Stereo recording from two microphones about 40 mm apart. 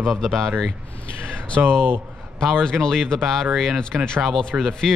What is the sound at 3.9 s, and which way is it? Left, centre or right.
Speech, right.